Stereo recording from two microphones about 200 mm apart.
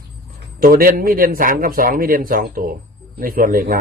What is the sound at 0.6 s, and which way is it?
A man's voice, 45° right (ahead or behind).